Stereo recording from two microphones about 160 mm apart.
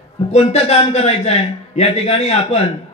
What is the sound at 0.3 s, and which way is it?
A man's voice, 40° left (ahead or behind).